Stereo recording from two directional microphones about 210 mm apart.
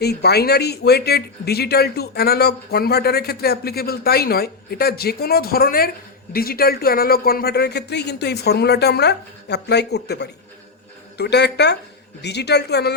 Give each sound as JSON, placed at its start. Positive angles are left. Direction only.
{"t": 0.0, "sound": "speech", "side_deg": 50}